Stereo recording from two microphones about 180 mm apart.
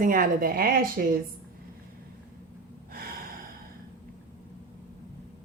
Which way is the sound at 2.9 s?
55° right (ahead or behind).